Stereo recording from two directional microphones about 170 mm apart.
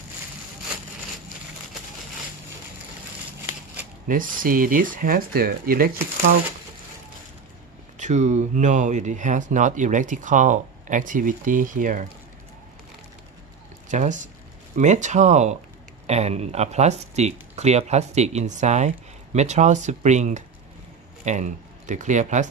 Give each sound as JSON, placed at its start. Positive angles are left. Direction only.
{"t": 4.1, "sound": "speech", "side_deg": -55}
{"t": 8.0, "sound": "speech", "side_deg": -45}
{"t": 13.8, "sound": "speech", "side_deg": -45}